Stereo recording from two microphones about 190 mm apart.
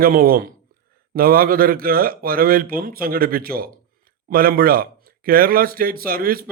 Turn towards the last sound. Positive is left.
turn(degrees=-50)  # may be behind; listen again after turning